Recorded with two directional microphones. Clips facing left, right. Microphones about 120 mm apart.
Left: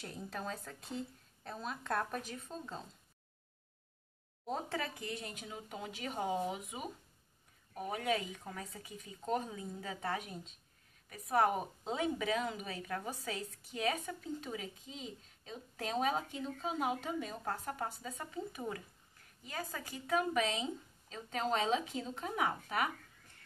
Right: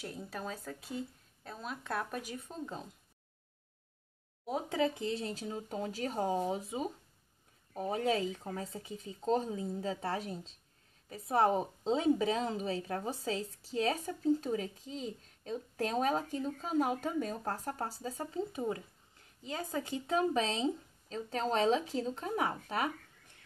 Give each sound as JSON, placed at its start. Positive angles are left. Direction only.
{"t": 0.0, "sound": "speech", "side_deg": -5}
{"t": 4.5, "sound": "a woman's voice", "side_deg": -15}